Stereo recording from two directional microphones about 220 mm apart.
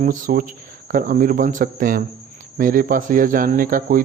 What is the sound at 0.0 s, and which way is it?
Speech, 35° right (ahead or behind).